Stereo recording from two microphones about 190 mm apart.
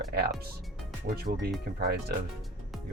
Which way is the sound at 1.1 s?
55° right (ahead or behind).